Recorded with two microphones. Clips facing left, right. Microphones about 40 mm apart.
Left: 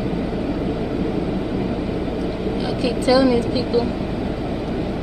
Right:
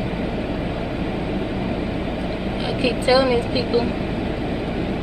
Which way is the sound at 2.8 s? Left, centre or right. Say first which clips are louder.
Left 1 dB; right.